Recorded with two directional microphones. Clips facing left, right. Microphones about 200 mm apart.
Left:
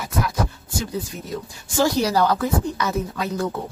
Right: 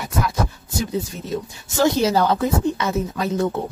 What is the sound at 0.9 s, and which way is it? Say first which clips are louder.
Speech: right 4 dB; 25° right (ahead or behind).